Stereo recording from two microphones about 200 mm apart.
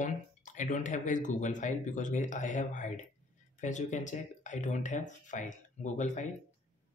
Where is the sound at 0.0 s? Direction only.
40° left (ahead or behind).